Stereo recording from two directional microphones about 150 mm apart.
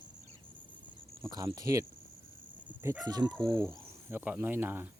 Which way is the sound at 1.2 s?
25° right (ahead or behind).